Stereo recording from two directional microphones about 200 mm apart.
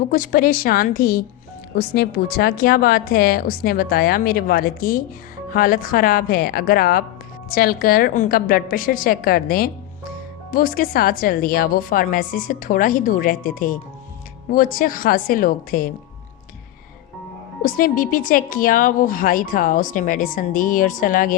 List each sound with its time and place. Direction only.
0.1 s speech: 45° left (ahead or behind)
17.6 s speech: 45° left (ahead or behind)